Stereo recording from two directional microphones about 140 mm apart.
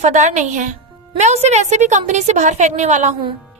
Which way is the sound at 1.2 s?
55° right (ahead or behind).